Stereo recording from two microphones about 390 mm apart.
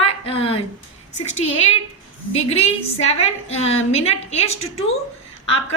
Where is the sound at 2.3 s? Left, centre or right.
Centre.